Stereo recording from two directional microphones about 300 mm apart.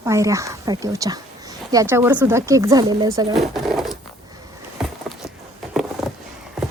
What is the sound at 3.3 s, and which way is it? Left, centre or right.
Drawer open or close, centre.